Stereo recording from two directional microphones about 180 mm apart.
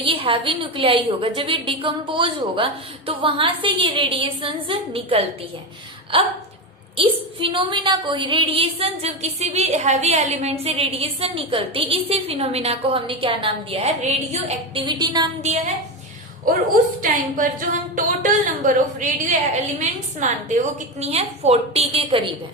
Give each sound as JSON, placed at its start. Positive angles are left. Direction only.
{"t": 0.0, "sound": "a woman's voice", "side_deg": -30}
{"t": 14.8, "sound": "a woman's voice", "side_deg": -25}
{"t": 15.4, "sound": "a woman's voice", "side_deg": -40}
{"t": 17.0, "sound": "a woman's voice", "side_deg": -50}